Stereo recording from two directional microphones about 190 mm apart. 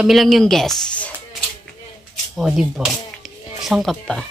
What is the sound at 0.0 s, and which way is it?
Speech, centre (ahead or behind).